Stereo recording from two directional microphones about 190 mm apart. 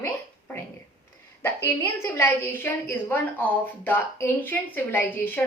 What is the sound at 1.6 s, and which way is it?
A woman's voice, 10° left (ahead or behind).